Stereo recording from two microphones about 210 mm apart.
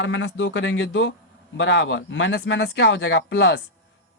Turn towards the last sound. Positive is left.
turn(degrees=60)  # may be behind; listen again after turning